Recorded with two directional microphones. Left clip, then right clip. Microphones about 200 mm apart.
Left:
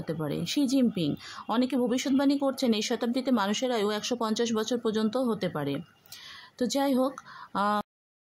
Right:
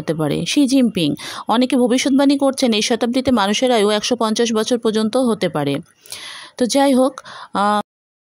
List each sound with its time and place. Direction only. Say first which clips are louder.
0.0 s speech: right 13 dB; 40° right (ahead or behind)